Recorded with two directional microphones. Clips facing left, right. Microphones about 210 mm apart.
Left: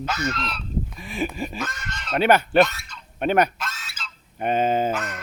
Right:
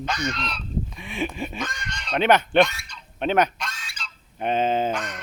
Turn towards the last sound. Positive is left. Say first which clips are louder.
# left 1 dB
turn(degrees=5)  # may be behind; listen again after turning